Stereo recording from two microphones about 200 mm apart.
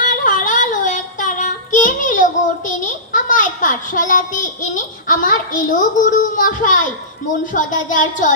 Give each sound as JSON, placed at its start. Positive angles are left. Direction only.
{"t": 0.0, "sound": "child singing", "side_deg": 40}
{"t": 2.6, "sound": "a child's voice", "side_deg": 40}